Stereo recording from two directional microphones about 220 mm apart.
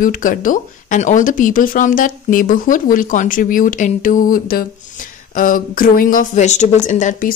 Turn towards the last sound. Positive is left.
turn(degrees=35)  # may be behind; listen again after turning